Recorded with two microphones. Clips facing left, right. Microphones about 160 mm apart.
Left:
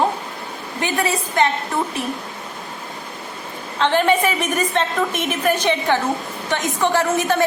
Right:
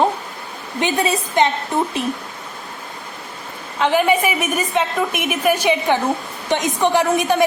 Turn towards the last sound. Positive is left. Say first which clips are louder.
# right 2 dB
turn(degrees=-15)  # may be behind; listen again after turning